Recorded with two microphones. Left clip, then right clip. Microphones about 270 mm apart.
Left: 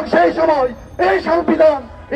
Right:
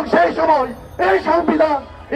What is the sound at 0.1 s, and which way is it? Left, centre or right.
Speech, left.